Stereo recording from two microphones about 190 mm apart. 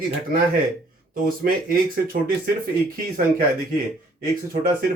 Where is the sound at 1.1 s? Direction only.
50° right (ahead or behind).